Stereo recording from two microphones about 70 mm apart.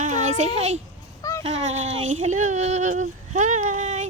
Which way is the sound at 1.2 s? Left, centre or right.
Left.